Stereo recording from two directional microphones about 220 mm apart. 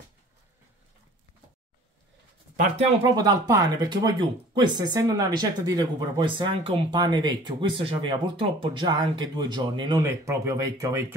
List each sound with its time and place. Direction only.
3.1 s speech: 20° right (ahead or behind)